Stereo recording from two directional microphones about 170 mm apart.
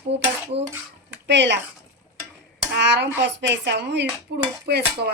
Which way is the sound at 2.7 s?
90° right.